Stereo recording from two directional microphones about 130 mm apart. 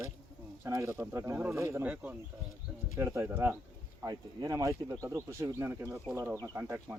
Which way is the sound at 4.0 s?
25° right (ahead or behind).